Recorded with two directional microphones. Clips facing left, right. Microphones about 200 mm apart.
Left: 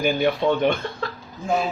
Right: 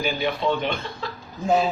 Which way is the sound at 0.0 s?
50° left (ahead or behind).